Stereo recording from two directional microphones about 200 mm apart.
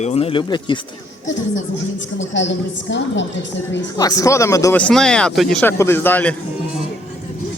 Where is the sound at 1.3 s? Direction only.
70° left (ahead or behind).